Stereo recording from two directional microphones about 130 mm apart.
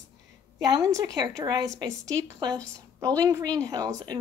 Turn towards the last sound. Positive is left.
turn(degrees=-30)  # may be behind; listen again after turning